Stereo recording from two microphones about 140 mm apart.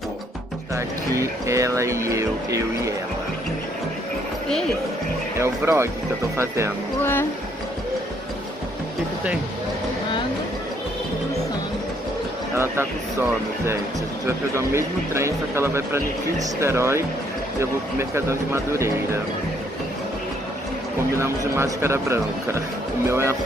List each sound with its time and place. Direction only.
0.7 s speech: 20° right (ahead or behind)
5.4 s speech: 20° right (ahead or behind)
7.0 s a sound: 15° left (ahead or behind)
14.2 s speech: 20° right (ahead or behind)
21.2 s speech: 20° right (ahead or behind)